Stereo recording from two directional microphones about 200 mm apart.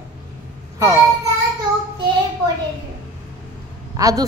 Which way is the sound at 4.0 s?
15° right (ahead or behind).